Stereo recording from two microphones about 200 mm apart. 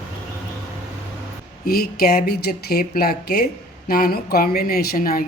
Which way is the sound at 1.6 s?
50° left (ahead or behind).